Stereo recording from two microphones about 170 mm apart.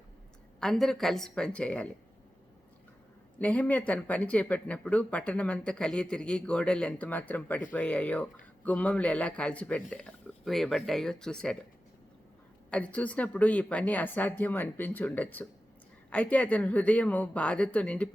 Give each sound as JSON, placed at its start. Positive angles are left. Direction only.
{"t": 0.6, "sound": "a woman's voice", "side_deg": 0}
{"t": 3.3, "sound": "speech", "side_deg": 10}
{"t": 12.7, "sound": "speech", "side_deg": 5}